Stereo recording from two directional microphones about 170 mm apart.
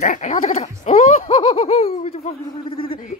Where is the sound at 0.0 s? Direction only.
45° left (ahead or behind).